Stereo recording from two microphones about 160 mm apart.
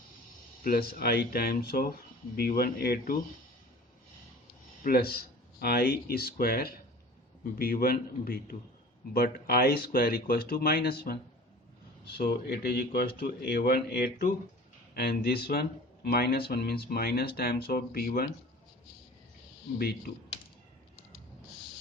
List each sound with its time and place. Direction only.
0.6 s speech: 70° left (ahead or behind)
4.8 s speech: 70° left (ahead or behind)
19.8 s speech: 75° left (ahead or behind)